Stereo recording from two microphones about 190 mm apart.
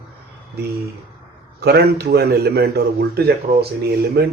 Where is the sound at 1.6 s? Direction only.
55° right (ahead or behind).